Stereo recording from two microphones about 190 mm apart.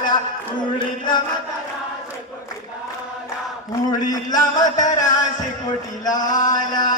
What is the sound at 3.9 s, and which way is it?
Speech, 20° left (ahead or behind).